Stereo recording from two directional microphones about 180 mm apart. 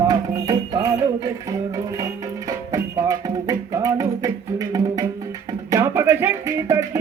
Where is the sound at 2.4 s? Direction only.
20° right (ahead or behind).